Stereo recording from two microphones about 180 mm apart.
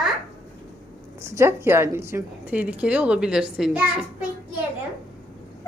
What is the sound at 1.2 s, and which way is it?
A woman's voice, 15° right (ahead or behind).